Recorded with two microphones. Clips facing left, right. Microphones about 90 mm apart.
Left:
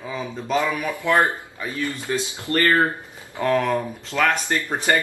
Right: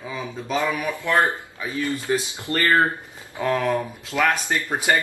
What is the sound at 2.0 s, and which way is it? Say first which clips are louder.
Speech: right 1 dB; 20° right (ahead or behind).